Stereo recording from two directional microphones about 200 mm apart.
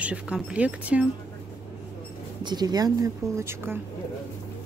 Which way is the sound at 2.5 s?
20° right (ahead or behind).